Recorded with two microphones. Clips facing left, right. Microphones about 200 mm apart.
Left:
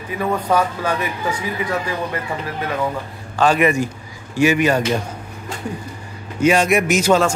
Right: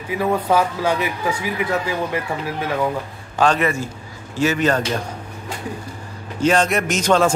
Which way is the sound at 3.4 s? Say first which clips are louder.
Left 3 dB; 15° left (ahead or behind).